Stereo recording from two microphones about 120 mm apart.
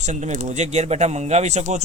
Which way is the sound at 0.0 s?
80° right.